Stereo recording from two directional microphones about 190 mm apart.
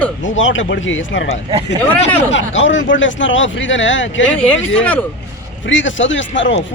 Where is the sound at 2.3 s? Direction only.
75° left (ahead or behind).